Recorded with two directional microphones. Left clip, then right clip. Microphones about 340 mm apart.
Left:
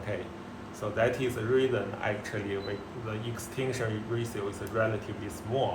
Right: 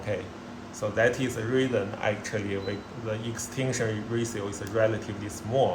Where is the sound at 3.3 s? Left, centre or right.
Right.